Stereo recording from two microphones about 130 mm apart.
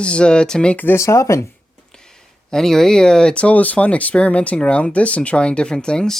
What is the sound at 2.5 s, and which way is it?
Speech, 5° left (ahead or behind).